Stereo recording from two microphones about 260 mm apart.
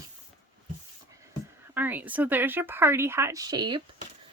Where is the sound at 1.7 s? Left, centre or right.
Centre.